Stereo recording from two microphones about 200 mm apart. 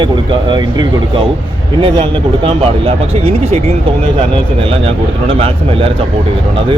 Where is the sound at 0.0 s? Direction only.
20° right (ahead or behind).